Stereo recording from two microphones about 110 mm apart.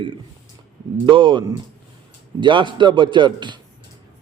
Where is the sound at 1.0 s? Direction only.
50° right (ahead or behind).